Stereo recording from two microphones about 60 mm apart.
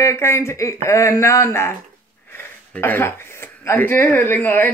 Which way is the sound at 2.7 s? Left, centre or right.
Left.